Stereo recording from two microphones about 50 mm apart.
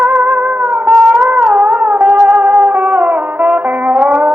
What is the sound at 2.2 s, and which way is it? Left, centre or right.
Music, right.